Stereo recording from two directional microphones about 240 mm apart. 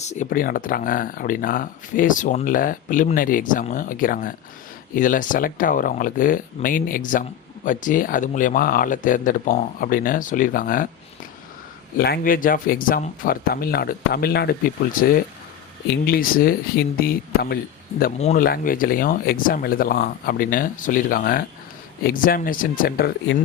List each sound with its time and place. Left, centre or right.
0.0 s speech: left
11.9 s speech: left
16.0 s speech: left